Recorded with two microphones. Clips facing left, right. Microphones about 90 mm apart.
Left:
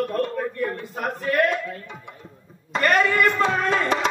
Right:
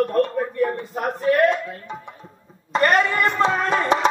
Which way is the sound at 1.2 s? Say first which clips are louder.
Right 4 dB; 25° right (ahead or behind).